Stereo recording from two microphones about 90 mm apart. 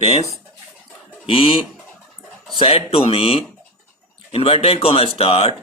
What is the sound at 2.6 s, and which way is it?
Speech, 90° left.